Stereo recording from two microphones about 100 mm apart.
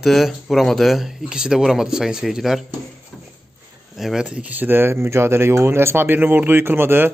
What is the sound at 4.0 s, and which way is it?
Speech, 5° right (ahead or behind).